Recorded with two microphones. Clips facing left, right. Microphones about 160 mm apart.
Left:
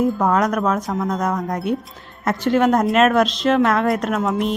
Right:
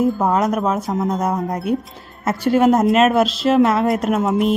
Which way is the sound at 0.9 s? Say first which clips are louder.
Right 2 dB; 30° right (ahead or behind).